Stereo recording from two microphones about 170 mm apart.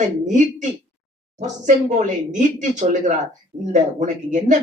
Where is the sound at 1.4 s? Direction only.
45° right (ahead or behind).